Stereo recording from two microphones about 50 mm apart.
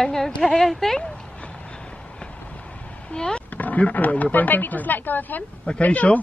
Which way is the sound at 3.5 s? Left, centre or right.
Left.